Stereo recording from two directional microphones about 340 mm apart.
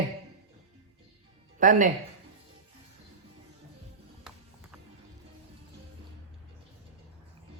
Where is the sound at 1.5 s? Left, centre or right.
Right.